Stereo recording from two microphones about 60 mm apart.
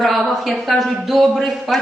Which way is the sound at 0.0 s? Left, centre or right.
Centre.